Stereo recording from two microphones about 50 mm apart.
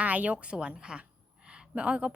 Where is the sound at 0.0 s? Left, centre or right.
Right.